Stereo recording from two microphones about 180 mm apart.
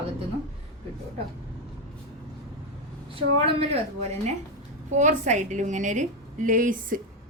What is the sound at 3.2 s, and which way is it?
Speech, 30° right (ahead or behind).